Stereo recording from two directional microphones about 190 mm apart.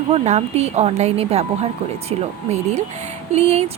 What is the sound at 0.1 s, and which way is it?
Speech, 35° right (ahead or behind).